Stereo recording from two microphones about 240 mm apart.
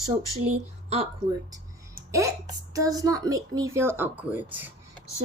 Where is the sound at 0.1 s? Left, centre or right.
Right.